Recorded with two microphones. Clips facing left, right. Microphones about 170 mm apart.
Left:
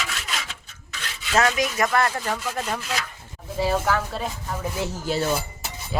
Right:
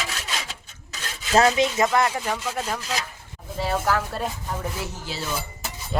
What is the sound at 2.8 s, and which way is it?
Speech, 35° right (ahead or behind).